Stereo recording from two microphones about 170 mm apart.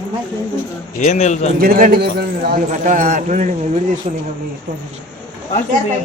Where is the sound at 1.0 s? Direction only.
45° left (ahead or behind).